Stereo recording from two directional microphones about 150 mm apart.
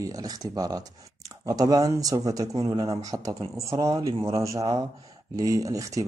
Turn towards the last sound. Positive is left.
turn(degrees=-20)  # may be behind; listen again after turning